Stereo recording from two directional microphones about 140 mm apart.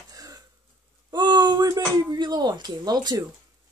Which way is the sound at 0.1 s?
25° right (ahead or behind).